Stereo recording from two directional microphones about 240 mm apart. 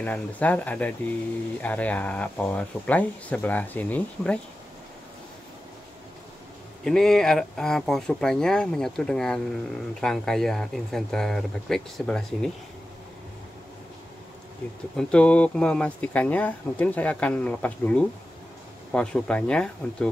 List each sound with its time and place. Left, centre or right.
0.0 s speech: centre
6.8 s speech: centre
14.6 s speech: centre